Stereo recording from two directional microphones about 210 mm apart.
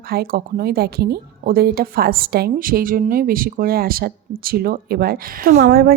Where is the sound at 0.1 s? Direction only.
45° right (ahead or behind).